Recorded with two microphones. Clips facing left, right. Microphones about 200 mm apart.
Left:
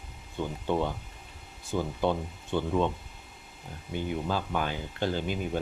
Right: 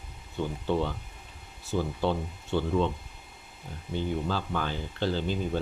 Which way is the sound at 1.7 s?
50° left (ahead or behind).